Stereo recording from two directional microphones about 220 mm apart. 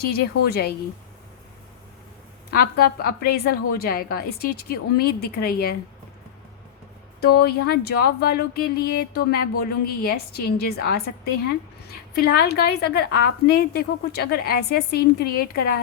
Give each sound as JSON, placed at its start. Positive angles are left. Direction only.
{"t": 0.4, "sound": "speech", "side_deg": 45}
{"t": 2.5, "sound": "speech", "side_deg": 45}
{"t": 7.2, "sound": "speech", "side_deg": 45}